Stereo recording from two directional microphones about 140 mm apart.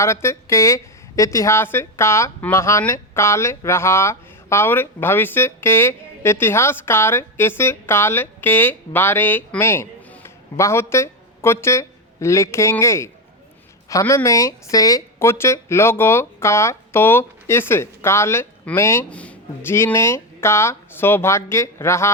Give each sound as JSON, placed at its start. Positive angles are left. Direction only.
{"t": 0.0, "sound": "a woman's voice", "side_deg": 20}